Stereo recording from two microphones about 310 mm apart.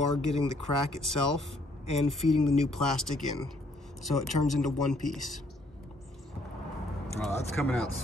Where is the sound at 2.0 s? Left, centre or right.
Centre.